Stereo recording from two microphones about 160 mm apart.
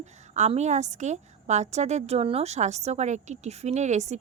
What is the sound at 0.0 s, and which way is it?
A woman's voice, 45° right (ahead or behind).